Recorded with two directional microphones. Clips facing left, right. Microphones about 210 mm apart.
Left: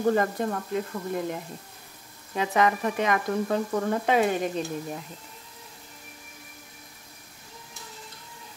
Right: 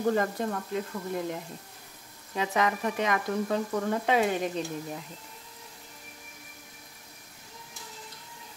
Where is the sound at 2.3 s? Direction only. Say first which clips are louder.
Left 4 dB; 55° left (ahead or behind).